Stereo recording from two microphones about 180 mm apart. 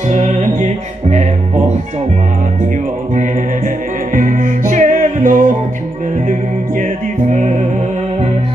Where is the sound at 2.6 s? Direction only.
45° right (ahead or behind).